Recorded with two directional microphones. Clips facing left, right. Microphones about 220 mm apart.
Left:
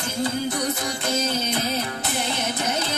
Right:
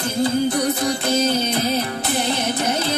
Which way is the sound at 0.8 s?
35° right (ahead or behind).